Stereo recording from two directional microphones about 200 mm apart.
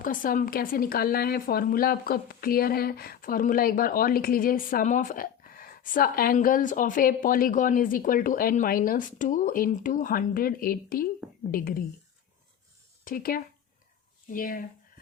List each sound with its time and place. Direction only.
0.0 s speech: 45° left (ahead or behind)
13.1 s speech: 45° left (ahead or behind)
14.3 s a sound: 45° left (ahead or behind)